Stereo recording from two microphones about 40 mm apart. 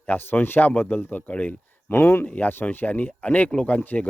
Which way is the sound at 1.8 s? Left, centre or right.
Left.